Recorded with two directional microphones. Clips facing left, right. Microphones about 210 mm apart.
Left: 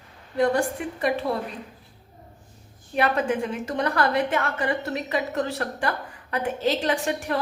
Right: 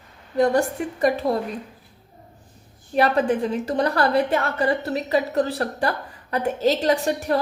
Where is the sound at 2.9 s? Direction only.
35° right (ahead or behind).